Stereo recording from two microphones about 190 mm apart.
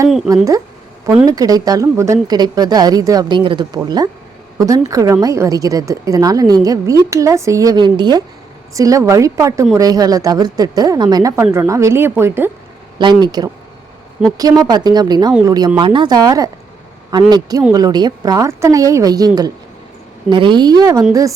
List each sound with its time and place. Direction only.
1.0 s a woman's voice: 15° right (ahead or behind)
13.0 s a woman's voice: 25° right (ahead or behind)
14.6 s a woman's voice: 20° right (ahead or behind)
20.3 s a woman's voice: 25° right (ahead or behind)